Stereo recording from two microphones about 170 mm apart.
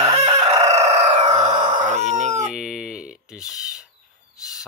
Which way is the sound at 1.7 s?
45° right (ahead or behind).